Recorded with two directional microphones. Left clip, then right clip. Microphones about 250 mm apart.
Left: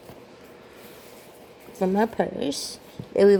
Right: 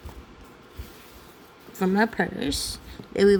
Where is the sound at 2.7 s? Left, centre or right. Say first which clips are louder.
Left 4 dB; right.